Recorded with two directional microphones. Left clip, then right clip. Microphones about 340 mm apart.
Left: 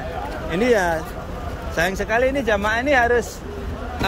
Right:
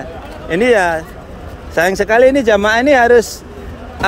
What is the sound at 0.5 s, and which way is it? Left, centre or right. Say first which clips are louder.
Speech: right 7 dB; centre.